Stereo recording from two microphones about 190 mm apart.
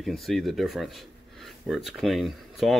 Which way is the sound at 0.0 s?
Centre (ahead or behind).